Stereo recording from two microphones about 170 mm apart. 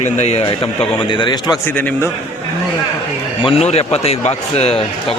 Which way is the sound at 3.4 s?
35° left (ahead or behind).